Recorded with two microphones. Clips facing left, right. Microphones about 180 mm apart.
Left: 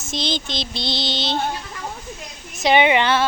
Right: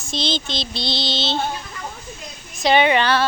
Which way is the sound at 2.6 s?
20° left (ahead or behind).